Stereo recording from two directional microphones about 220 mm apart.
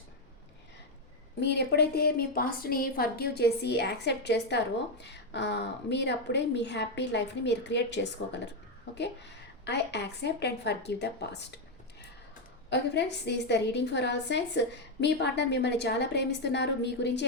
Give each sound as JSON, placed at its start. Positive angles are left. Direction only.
{"t": 1.4, "sound": "a woman's voice", "side_deg": 50}
{"t": 9.6, "sound": "a woman's voice", "side_deg": 50}
{"t": 12.7, "sound": "a woman's voice", "side_deg": 50}